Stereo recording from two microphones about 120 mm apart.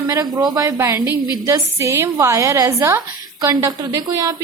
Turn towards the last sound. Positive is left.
turn(degrees=-30)  # may be behind; listen again after turning